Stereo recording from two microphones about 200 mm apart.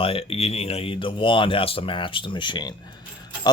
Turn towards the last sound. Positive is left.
turn(degrees=20)  # may be behind; listen again after turning